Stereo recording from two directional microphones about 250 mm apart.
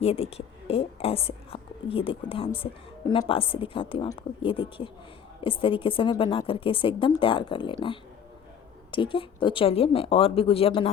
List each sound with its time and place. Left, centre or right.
0.0 s a woman's voice: left